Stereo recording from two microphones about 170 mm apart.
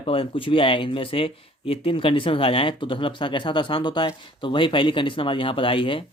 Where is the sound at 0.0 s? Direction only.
35° left (ahead or behind).